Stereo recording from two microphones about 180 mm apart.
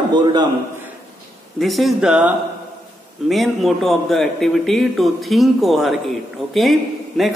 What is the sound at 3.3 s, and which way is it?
A man's voice, centre (ahead or behind).